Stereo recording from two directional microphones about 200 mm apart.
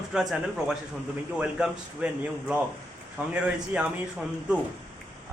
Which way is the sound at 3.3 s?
5° right (ahead or behind).